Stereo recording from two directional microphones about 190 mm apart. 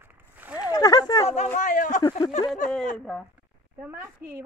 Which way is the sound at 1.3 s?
40° left (ahead or behind).